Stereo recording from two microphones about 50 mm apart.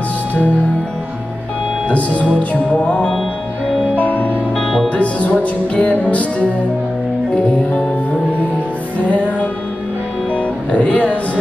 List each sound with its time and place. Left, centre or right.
1.9 s music: left
9.1 s music: left